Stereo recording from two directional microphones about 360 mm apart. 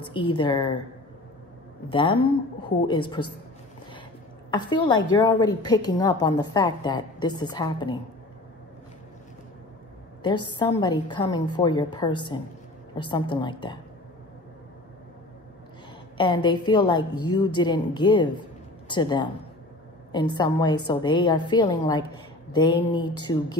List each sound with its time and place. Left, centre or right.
0.0 s a woman's voice: centre
1.9 s a woman's voice: centre
4.5 s a woman's voice: centre
10.4 s a woman's voice: centre
16.2 s a woman's voice: centre
20.3 s a woman's voice: centre